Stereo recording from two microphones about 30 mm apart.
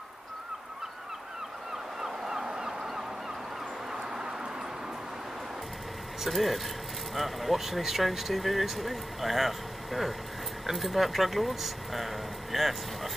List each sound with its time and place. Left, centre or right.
2.0 s a sound: centre
2.4 s honk: right
6.2 s speech: centre